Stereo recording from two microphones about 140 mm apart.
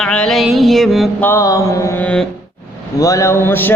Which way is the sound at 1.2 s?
15° left (ahead or behind).